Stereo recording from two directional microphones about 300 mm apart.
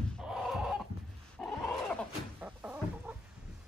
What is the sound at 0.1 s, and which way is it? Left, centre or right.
Chicken, centre.